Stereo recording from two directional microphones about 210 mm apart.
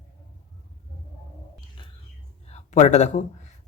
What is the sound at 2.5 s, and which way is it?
Speech, 35° left (ahead or behind).